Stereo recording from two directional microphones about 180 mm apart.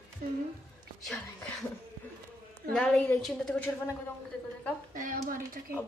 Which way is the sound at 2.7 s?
5° left (ahead or behind).